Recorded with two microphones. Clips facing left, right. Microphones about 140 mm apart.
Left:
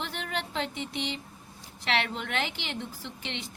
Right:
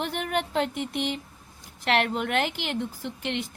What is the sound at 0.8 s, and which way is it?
A woman's voice, 50° right (ahead or behind).